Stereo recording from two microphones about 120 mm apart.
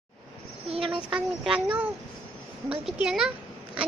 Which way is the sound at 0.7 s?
50° right (ahead or behind).